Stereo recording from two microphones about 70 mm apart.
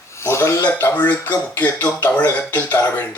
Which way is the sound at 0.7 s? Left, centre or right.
Left.